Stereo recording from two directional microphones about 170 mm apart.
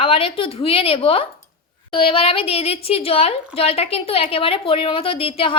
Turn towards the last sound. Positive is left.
turn(degrees=30)  # may be behind; listen again after turning